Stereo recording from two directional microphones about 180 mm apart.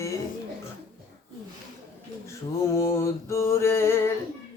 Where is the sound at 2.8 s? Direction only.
15° left (ahead or behind).